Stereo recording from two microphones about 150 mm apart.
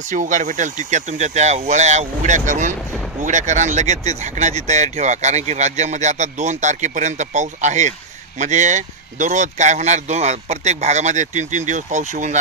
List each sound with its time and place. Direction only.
0.1 s speech: 55° right (ahead or behind)